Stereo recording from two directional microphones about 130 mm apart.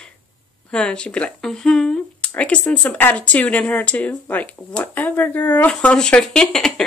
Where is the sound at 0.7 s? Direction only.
5° left (ahead or behind).